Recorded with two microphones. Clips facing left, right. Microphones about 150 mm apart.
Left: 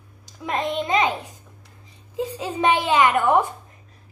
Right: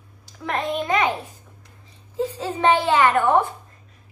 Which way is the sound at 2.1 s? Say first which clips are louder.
Right 1 dB; 15° left (ahead or behind).